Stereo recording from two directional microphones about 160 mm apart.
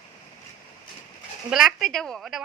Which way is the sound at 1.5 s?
Centre (ahead or behind).